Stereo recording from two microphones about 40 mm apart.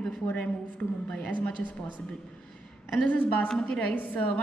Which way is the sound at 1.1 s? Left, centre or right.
Left.